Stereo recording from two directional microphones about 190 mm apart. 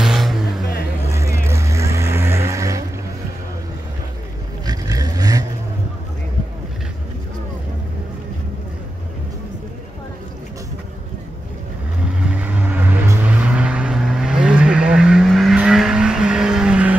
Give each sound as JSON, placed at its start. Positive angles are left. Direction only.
{"t": 0.0, "sound": "music", "side_deg": 0}
{"t": 1.0, "sound": "vehicle", "side_deg": -15}
{"t": 4.6, "sound": "vehicle", "side_deg": -20}
{"t": 12.3, "sound": "vehicle", "side_deg": -5}